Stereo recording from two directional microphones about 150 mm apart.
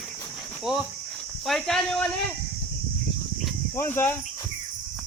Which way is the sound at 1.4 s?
5° left (ahead or behind).